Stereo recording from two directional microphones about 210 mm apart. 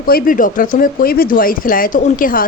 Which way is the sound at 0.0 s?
45° left (ahead or behind).